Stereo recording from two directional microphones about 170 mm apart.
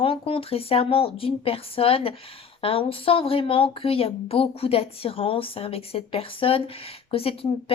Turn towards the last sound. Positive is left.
turn(degrees=35)  # may be behind; listen again after turning